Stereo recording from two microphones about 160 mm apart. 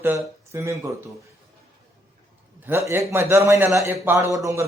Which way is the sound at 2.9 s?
15° right (ahead or behind).